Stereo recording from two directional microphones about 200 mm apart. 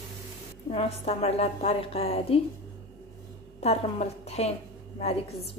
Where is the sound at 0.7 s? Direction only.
30° left (ahead or behind).